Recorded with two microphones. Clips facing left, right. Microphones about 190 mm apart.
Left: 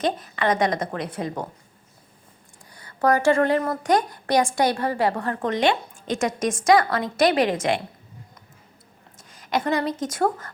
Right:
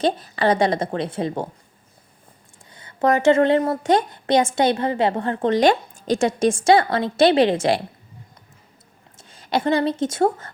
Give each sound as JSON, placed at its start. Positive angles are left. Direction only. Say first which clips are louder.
{"t": 0.0, "sound": "a woman's voice", "louder": "right 4 dB", "side_deg": -30}
{"t": 2.7, "sound": "a woman's voice", "louder": "right 2 dB", "side_deg": -20}
{"t": 5.5, "sound": "a woman's voice", "louder": "right 5 dB", "side_deg": -35}
{"t": 9.1, "sound": "speech", "louder": "right 2 dB", "side_deg": -30}